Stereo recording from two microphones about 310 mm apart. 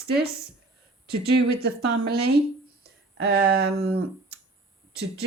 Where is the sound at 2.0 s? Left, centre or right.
Right.